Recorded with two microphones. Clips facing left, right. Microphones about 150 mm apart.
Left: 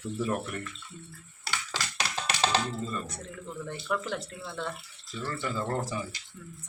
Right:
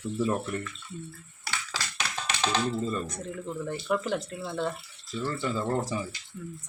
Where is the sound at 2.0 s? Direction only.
35° left (ahead or behind).